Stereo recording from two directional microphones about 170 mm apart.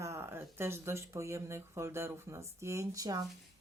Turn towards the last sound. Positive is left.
turn(degrees=-20)  # may be behind; listen again after turning